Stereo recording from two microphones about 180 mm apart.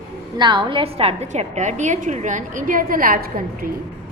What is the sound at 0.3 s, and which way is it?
A woman's voice, 25° right (ahead or behind).